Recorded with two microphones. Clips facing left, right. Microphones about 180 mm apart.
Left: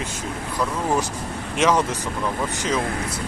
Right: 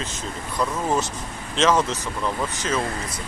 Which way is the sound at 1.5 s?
10° left (ahead or behind).